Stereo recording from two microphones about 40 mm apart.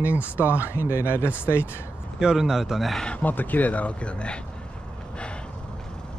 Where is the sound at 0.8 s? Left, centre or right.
Left.